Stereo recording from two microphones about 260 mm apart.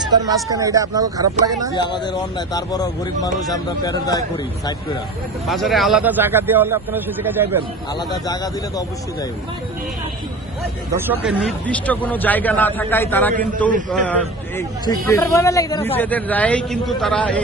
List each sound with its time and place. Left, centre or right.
0.0 s a man's voice: centre
1.7 s a man's voice: centre
5.5 s a man's voice: centre
7.9 s a man's voice: centre
10.9 s a man's voice: centre